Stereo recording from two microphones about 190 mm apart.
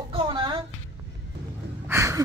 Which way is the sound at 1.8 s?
15° right (ahead or behind).